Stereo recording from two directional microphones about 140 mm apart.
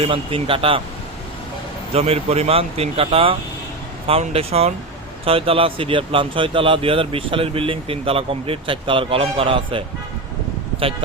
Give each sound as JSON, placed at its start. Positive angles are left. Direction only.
{"t": 0.0, "sound": "speech", "side_deg": -40}
{"t": 1.9, "sound": "speech", "side_deg": -45}